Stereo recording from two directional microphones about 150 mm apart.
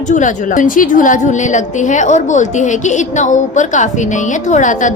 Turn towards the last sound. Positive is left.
turn(degrees=55)  # may be behind; listen again after turning